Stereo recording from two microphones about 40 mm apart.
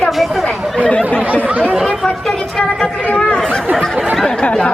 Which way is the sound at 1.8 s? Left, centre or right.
Centre.